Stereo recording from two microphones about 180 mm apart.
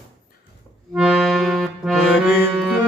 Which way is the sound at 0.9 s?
Centre (ahead or behind).